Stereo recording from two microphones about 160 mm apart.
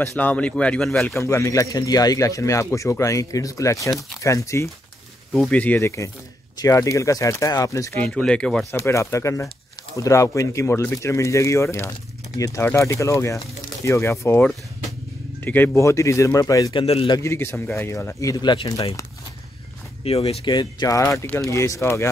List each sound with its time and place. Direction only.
0.1 s speech: 10° left (ahead or behind)
1.2 s speech: 20° left (ahead or behind)
5.3 s speech: 5° left (ahead or behind)
8.1 s speech: 5° left (ahead or behind)
8.7 s speech: 20° left (ahead or behind)
16.8 s a man's voice: 40° left (ahead or behind)
17.2 s speech: 15° left (ahead or behind)
20.0 s speech: 35° left (ahead or behind); by 22.1 s 15° left (ahead or behind)